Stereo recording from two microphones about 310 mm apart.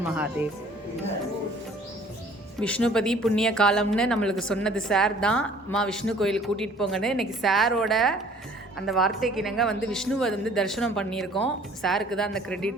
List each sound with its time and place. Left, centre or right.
2.6 s speech: centre